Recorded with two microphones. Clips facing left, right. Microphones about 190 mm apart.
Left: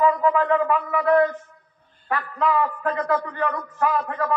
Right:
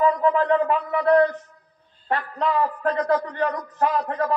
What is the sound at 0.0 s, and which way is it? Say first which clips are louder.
A man's voice: even; 30° right (ahead or behind).